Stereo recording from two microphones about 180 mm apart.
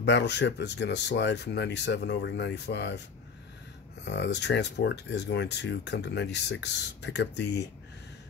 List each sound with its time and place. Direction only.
0.0 s speech: 70° left (ahead or behind)
4.0 s speech: 70° left (ahead or behind)